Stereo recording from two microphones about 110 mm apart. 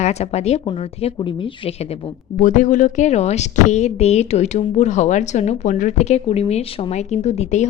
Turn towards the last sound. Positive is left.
turn(degrees=85)